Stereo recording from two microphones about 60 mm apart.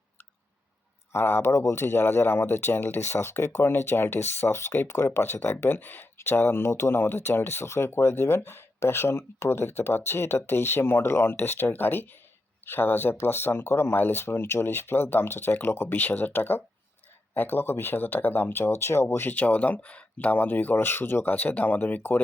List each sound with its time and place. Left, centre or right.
1.1 s speech: left
20.1 s speech: left